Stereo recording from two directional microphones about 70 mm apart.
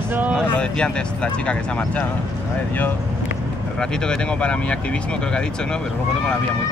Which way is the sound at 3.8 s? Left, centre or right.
Centre.